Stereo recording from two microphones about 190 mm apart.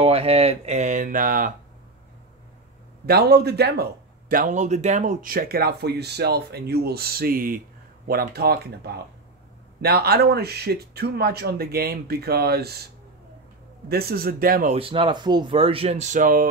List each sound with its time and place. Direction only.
0.0 s speech: 30° right (ahead or behind); by 1.5 s 45° right (ahead or behind)
3.1 s speech: 60° right (ahead or behind)
4.3 s speech: 45° right (ahead or behind)
14.8 s speech: 30° right (ahead or behind); by 16.4 s 45° right (ahead or behind)